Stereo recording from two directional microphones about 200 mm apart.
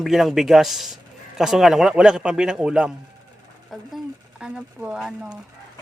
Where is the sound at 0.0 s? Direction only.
Centre (ahead or behind).